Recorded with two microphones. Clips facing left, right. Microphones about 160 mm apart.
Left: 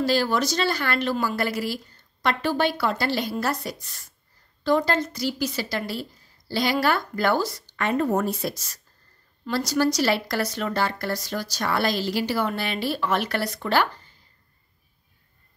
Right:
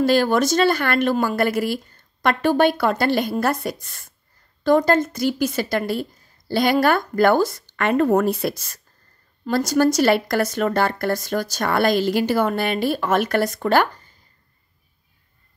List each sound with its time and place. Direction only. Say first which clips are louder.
0.0 s a woman's voice: right 5 dB; 55° right (ahead or behind)